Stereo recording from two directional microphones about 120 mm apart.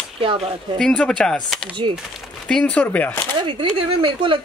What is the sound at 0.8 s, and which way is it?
Speech, 5° left (ahead or behind).